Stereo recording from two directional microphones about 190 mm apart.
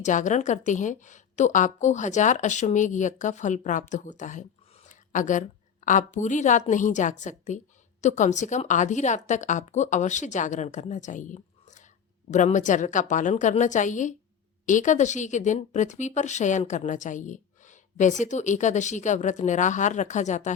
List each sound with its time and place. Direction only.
0.0 s a woman's voice: 40° left (ahead or behind)